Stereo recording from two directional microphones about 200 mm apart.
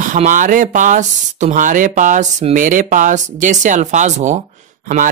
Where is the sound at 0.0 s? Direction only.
40° right (ahead or behind).